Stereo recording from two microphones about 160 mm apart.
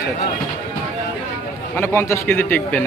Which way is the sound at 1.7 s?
15° left (ahead or behind).